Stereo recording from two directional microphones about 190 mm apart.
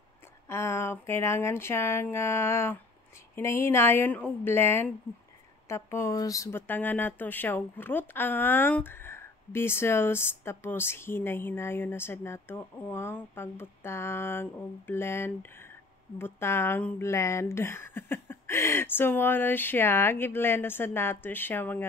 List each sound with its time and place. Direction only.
0.5 s speech: 15° left (ahead or behind)